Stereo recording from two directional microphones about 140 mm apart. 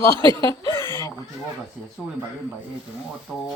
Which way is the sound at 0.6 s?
20° left (ahead or behind).